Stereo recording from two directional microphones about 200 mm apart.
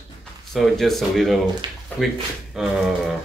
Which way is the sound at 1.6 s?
20° right (ahead or behind).